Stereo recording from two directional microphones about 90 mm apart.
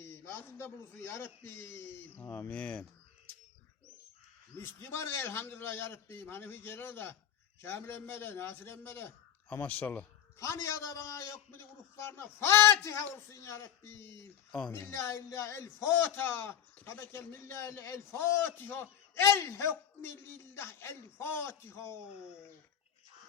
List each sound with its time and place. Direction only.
0.0 s a man's voice: 25° left (ahead or behind)
2.5 s speech: 15° left (ahead or behind)
4.5 s a man's voice: 25° left (ahead or behind)
10.3 s a man's voice: 35° left (ahead or behind)